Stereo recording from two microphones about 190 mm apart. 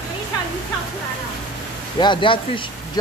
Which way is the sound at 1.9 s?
25° left (ahead or behind).